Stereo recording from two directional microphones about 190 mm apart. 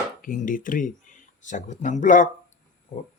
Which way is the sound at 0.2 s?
45° left (ahead or behind).